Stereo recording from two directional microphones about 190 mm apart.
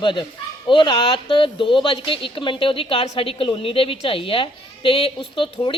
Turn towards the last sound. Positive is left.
turn(degrees=25)  # may be behind; listen again after turning